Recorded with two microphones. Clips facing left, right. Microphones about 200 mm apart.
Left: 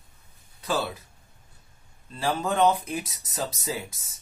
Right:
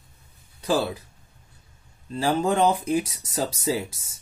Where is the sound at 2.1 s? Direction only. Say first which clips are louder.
Right 5 dB; 30° right (ahead or behind).